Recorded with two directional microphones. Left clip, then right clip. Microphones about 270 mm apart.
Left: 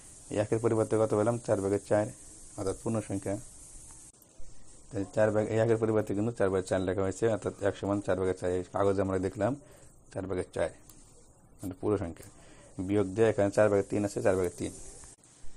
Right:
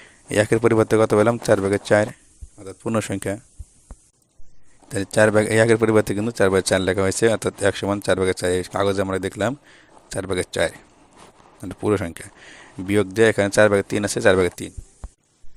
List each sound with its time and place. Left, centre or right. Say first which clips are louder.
0.3 s speech: right 11 dB; right
4.9 s speech: right 11 dB; right
11.7 s speech: right 9 dB; right